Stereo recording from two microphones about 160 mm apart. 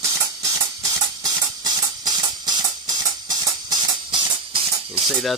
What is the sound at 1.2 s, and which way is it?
Music, 25° right (ahead or behind).